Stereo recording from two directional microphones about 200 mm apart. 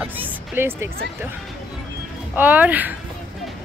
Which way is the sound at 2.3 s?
10° right (ahead or behind).